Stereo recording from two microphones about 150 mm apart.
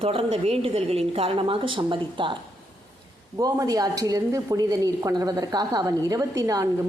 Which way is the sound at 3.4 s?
25° right (ahead or behind).